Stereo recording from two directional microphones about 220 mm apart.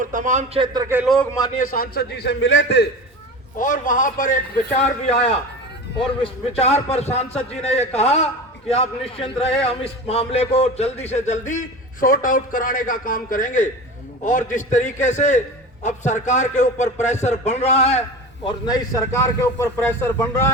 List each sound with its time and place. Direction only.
0.0 s speech: 35° right (ahead or behind); by 1.0 s 15° right (ahead or behind)
1.0 s a man's voice: 5° left (ahead or behind)
1.7 s a man's voice: 45° left (ahead or behind)
3.6 s a man's voice: 35° left (ahead or behind)
6.2 s a man's voice: 30° left (ahead or behind); by 20.5 s 15° left (ahead or behind)